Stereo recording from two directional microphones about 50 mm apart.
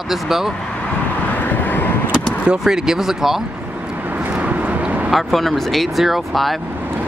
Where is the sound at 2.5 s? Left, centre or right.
Centre.